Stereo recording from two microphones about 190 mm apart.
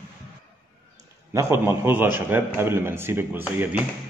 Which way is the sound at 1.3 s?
15° right (ahead or behind).